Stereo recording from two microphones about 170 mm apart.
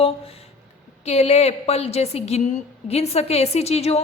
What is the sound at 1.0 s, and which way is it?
A woman's voice, 40° left (ahead or behind).